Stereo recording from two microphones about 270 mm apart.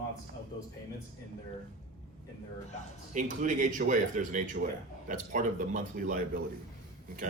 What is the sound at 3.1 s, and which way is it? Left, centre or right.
Speech, right.